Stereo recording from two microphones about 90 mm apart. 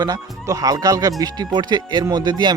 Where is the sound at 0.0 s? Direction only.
45° right (ahead or behind).